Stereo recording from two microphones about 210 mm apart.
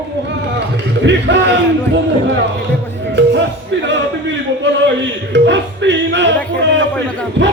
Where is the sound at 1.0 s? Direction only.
55° right (ahead or behind).